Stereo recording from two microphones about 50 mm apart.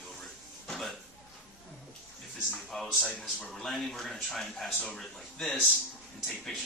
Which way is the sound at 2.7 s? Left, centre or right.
Centre.